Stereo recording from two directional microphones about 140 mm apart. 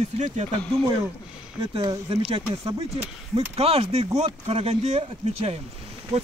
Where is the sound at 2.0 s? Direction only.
45° right (ahead or behind).